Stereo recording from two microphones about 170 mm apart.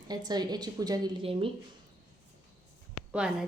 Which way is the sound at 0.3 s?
25° right (ahead or behind).